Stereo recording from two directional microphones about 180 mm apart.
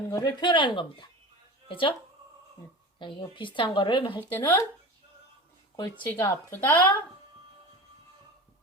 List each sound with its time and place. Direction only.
0.1 s a woman's voice: 20° left (ahead or behind)
3.0 s a woman's voice: 25° left (ahead or behind)
4.2 s speech: 10° left (ahead or behind)
5.7 s speech: 20° left (ahead or behind)